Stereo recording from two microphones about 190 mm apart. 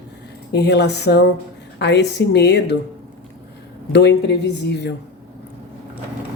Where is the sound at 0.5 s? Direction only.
60° left (ahead or behind).